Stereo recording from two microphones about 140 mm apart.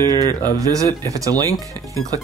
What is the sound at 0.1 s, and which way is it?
Speech, 30° right (ahead or behind).